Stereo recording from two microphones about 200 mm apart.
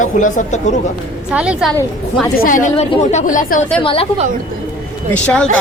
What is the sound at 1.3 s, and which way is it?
Speech, 5° right (ahead or behind).